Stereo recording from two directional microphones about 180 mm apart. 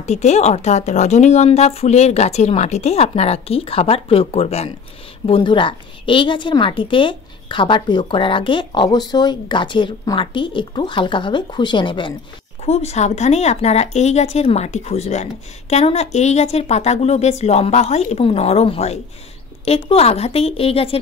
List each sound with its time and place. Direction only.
0.0 s a woman's voice: 40° left (ahead or behind)